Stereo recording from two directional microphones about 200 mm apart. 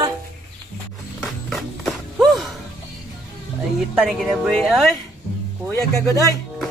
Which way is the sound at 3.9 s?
Centre (ahead or behind).